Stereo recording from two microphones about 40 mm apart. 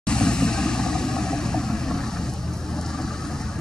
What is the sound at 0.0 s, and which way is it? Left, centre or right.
Vehicle, left.